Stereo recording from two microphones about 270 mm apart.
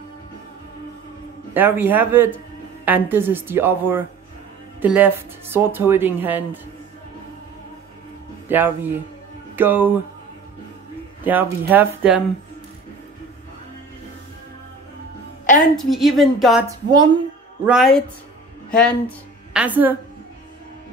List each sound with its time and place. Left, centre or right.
1.5 s speech: centre
8.5 s speech: centre
11.2 s speech: centre
15.4 s music: left
15.7 s a woman's voice: centre
16.6 s speech: centre
17.6 s a woman's voice: centre